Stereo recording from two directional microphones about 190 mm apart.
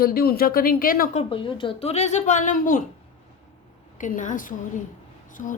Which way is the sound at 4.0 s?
40° left (ahead or behind).